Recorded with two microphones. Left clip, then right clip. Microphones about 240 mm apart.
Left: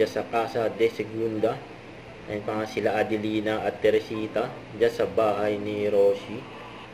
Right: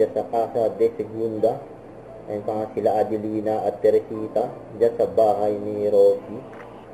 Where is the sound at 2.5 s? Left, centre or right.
Left.